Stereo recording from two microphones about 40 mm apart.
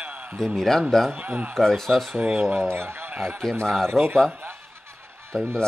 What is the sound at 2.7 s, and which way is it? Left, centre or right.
Speech, right.